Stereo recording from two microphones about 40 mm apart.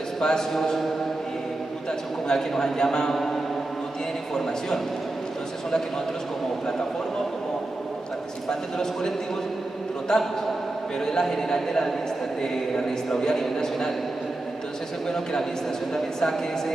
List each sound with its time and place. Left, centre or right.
0.2 s a man's voice: centre
2.2 s a man's voice: centre
4.3 s a man's voice: centre
8.5 s a man's voice: centre
13.2 s a man's voice: centre
15.0 s a man's voice: centre